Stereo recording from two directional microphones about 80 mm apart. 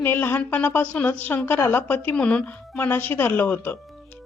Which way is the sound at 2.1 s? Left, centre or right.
Centre.